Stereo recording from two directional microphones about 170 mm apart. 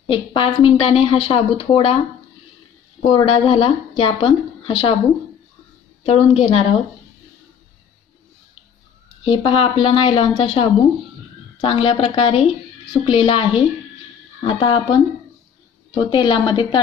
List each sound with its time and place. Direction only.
0.0 s a woman's voice: 30° left (ahead or behind)
3.0 s speech: 30° left (ahead or behind)
6.0 s speech: 35° left (ahead or behind)
9.2 s a woman's voice: 30° left (ahead or behind)